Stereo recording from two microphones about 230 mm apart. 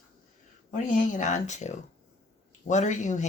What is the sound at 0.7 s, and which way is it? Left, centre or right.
Speech, left.